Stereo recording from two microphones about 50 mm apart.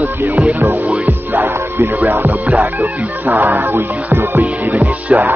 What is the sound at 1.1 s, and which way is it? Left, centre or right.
Music, right.